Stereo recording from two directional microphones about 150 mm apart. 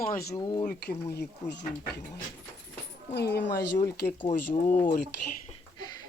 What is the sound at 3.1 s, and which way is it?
Speech, 90° left.